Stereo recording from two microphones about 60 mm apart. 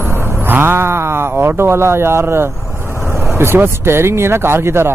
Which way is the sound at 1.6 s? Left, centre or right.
Right.